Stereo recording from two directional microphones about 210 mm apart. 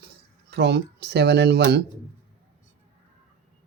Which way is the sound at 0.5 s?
55° right (ahead or behind).